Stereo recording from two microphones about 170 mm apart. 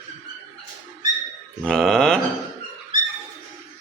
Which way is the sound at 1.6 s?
5° left (ahead or behind).